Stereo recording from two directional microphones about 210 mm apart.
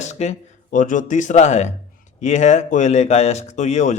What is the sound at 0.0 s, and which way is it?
A man's voice, 30° left (ahead or behind).